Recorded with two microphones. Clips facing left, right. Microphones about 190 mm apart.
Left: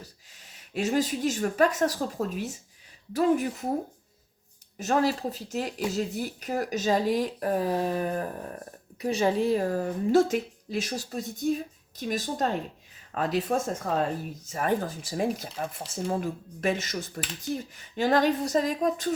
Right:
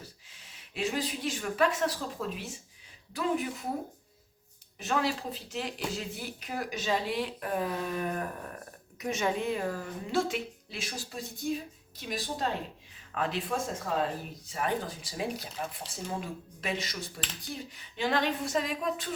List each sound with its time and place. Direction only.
0.3 s a woman's voice: 40° left (ahead or behind)
4.8 s a woman's voice: 40° left (ahead or behind)